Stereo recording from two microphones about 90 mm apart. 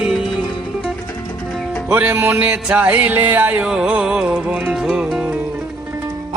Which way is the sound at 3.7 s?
10° right (ahead or behind).